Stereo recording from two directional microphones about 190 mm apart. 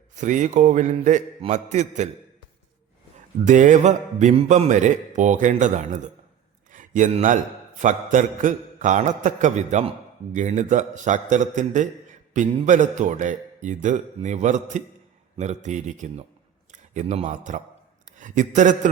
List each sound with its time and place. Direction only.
0.2 s speech: 40° right (ahead or behind)
3.4 s speech: 40° right (ahead or behind)